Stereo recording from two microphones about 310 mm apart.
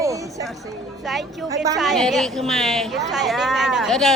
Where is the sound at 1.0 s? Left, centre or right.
Centre.